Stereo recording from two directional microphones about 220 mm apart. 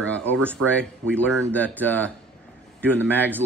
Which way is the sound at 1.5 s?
5° left (ahead or behind).